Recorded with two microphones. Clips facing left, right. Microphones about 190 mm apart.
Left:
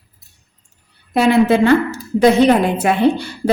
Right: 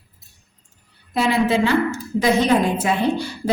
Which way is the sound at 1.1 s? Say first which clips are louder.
Left 6 dB; 60° left (ahead or behind).